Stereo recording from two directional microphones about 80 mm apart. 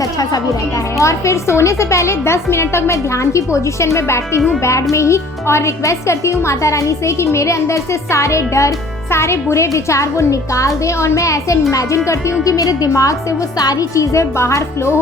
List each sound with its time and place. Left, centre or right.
0.9 s a child's voice: left